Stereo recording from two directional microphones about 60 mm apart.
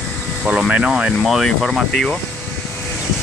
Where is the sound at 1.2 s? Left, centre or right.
Centre.